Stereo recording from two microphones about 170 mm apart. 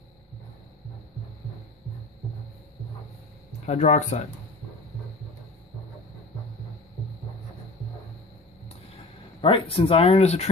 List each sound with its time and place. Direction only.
3.6 s speech: 40° left (ahead or behind)
9.4 s speech: 30° left (ahead or behind)